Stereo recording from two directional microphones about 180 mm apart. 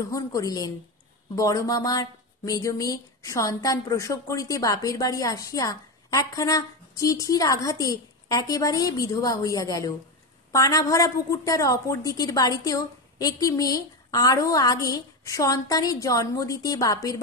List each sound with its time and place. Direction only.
0.0 s a woman's voice: 20° left (ahead or behind)